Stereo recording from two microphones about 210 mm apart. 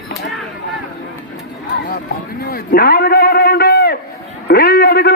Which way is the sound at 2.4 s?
45° left (ahead or behind).